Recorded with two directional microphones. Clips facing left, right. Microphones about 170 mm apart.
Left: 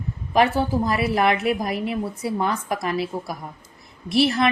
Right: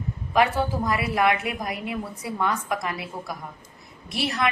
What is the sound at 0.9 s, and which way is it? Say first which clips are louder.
A woman's voice: left 2 dB; 30° left (ahead or behind).